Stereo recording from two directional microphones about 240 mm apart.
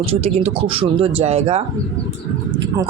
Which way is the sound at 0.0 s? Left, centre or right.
Right.